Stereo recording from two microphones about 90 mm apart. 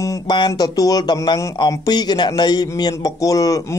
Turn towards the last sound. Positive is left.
turn(degrees=40)  # may be behind; listen again after turning